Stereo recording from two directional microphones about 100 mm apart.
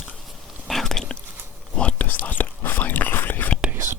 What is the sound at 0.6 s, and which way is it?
Whispering, 5° left (ahead or behind).